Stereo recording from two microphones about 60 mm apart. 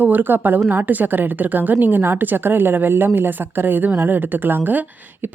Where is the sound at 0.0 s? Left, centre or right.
Right.